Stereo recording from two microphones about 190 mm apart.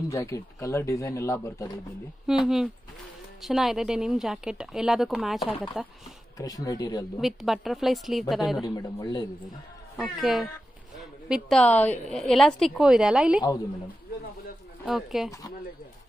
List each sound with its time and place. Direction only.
0.1 s speech: 15° left (ahead or behind)
2.2 s a woman's voice: centre (ahead or behind)
6.3 s speech: 20° left (ahead or behind)
7.2 s a woman's voice: centre (ahead or behind)
8.5 s speech: 20° left (ahead or behind)
9.9 s a woman's voice: centre (ahead or behind)
14.9 s a woman's voice: centre (ahead or behind)